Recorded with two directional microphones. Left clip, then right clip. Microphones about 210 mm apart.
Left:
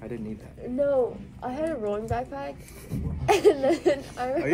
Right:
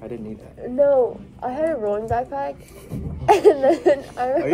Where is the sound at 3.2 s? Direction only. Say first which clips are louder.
Right 6 dB; 20° right (ahead or behind).